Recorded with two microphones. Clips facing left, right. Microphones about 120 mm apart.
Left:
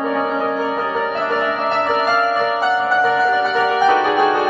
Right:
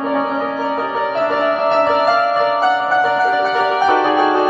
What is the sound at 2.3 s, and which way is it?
Music, 40° right (ahead or behind).